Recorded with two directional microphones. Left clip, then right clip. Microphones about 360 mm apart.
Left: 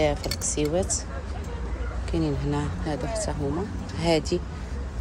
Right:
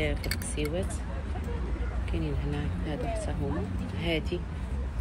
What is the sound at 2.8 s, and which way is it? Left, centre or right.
Speech, centre.